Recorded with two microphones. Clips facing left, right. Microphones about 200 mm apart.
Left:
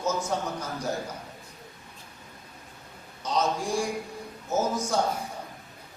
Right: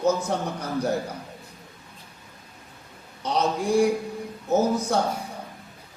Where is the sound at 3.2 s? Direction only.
60° right (ahead or behind).